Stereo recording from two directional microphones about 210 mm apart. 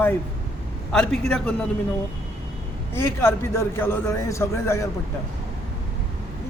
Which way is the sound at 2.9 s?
10° left (ahead or behind).